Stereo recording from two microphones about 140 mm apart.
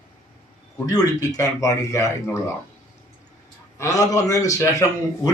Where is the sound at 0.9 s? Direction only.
25° left (ahead or behind).